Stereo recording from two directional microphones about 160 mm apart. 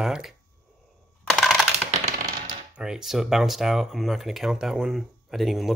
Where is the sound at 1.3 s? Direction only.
Centre (ahead or behind).